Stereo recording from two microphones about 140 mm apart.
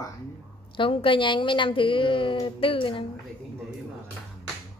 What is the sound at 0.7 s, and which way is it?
A woman's voice, 40° left (ahead or behind).